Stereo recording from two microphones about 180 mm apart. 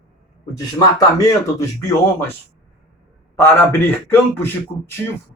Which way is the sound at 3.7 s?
15° left (ahead or behind).